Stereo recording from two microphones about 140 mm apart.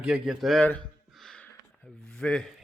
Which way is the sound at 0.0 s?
5° right (ahead or behind).